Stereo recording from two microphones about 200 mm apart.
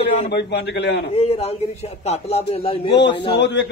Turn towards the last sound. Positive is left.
turn(degrees=60)  # may be behind; listen again after turning